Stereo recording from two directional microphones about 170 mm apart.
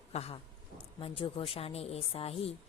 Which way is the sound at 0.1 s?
35° left (ahead or behind).